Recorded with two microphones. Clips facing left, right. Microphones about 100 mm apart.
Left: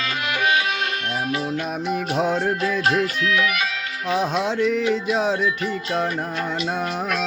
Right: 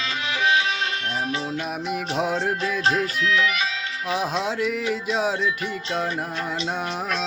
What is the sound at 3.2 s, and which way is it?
Music, 50° left (ahead or behind).